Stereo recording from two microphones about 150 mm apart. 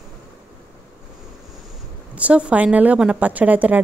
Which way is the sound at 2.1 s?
10° right (ahead or behind).